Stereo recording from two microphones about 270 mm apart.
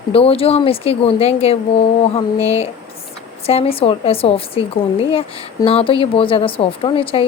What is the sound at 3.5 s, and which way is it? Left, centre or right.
A woman's voice, left.